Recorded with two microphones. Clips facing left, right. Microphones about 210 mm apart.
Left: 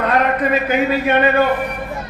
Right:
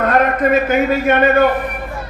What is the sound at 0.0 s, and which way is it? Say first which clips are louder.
Speech: right 2 dB; 50° right (ahead or behind).